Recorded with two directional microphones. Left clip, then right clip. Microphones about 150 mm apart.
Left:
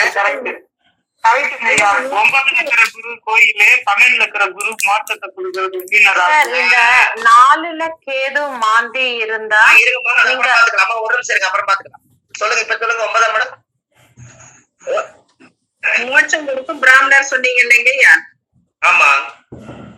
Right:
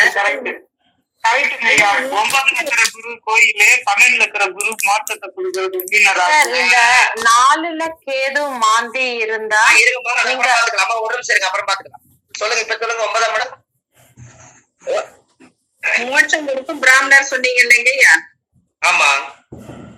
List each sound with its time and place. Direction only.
0.0 s a man's voice: 15° right (ahead or behind)